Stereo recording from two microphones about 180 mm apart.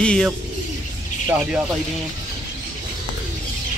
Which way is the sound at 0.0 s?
5° left (ahead or behind).